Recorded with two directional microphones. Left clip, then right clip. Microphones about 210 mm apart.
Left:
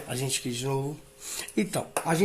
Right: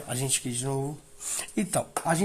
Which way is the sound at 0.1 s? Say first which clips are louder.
Even; 55° right (ahead or behind).